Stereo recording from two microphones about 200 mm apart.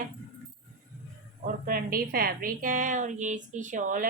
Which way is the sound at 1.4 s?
45° right (ahead or behind).